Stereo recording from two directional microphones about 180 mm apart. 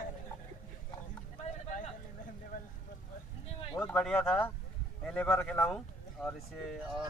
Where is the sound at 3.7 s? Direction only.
15° left (ahead or behind).